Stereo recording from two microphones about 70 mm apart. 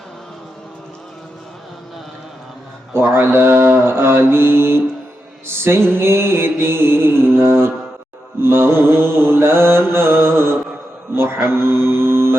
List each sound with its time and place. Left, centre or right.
3.1 s mantra: right
11.1 s speech: right